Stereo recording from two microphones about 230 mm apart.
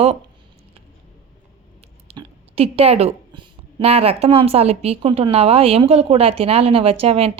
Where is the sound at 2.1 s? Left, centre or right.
Right.